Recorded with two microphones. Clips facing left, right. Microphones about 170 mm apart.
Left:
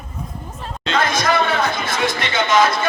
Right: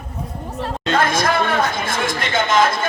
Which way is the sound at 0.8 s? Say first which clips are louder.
Right 1 dB; 50° right (ahead or behind).